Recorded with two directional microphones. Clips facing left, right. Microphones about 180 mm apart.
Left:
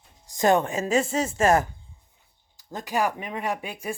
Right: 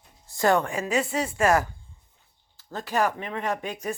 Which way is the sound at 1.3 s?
25° left (ahead or behind).